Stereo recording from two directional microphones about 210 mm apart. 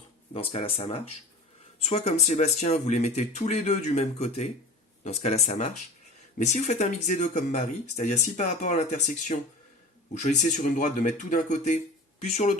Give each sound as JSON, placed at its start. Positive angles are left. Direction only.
{"t": 0.3, "sound": "speech", "side_deg": 25}